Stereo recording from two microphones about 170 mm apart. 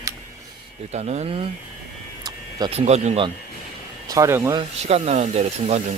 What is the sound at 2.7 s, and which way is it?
Speech, 40° right (ahead or behind).